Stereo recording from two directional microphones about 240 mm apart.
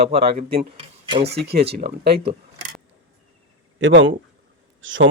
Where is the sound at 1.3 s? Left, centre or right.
Right.